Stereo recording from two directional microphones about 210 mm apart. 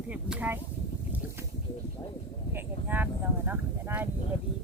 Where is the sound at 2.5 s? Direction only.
10° right (ahead or behind).